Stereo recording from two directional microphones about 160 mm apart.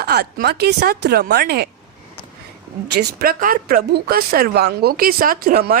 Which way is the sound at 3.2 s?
65° right (ahead or behind).